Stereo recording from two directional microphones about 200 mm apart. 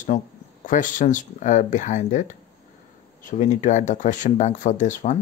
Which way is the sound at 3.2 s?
40° left (ahead or behind).